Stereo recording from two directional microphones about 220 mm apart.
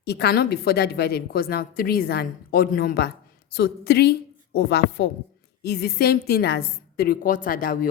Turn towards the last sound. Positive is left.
turn(degrees=40)  # may be behind; listen again after turning